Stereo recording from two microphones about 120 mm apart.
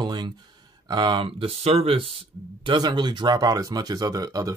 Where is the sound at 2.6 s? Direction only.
40° right (ahead or behind).